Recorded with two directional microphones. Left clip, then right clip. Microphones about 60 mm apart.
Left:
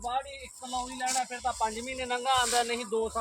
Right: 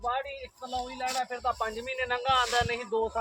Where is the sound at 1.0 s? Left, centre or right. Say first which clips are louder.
Left 1 dB; left.